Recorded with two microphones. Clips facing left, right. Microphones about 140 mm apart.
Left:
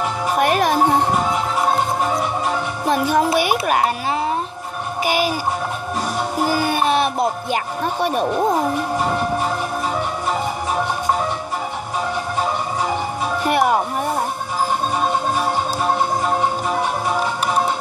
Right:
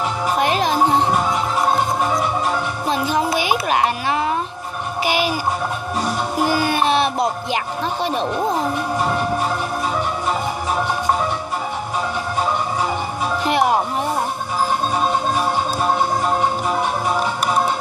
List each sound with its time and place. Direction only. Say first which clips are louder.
0.4 s music: left 2 dB; 55° left (ahead or behind)
2.9 s music: left 3 dB; 55° left (ahead or behind)
3.3 s a sound: left 1 dB; 45° left (ahead or behind)
6.4 s music: right 1 dB; 45° left (ahead or behind)
13.5 s music: left 1 dB; 50° left (ahead or behind)